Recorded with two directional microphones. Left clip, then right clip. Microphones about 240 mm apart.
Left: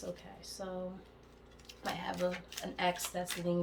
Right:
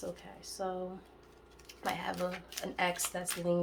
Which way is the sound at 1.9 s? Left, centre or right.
Centre.